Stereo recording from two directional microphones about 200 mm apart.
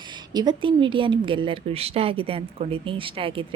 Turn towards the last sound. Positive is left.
turn(degrees=-25)  # may be behind; listen again after turning